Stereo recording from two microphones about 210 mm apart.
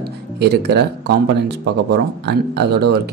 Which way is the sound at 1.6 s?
50° right (ahead or behind).